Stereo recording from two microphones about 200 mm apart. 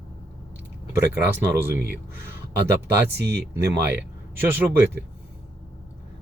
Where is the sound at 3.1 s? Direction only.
55° right (ahead or behind).